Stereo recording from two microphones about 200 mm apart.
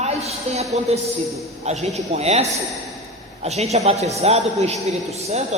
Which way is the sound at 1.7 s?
35° right (ahead or behind).